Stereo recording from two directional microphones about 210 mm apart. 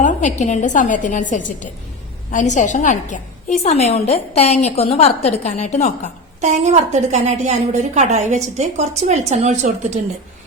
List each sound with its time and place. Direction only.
0.0 s a woman's voice: 35° left (ahead or behind)
6.4 s a woman's voice: 35° right (ahead or behind)